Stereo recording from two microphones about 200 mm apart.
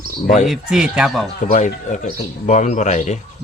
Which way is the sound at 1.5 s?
35° left (ahead or behind).